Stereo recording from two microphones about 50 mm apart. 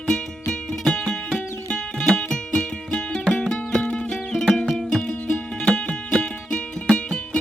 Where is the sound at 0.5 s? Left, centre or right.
Centre.